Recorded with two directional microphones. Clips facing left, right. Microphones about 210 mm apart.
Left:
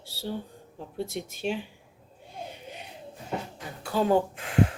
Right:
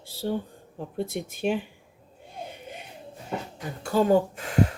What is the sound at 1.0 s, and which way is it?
Speech, 55° right (ahead or behind).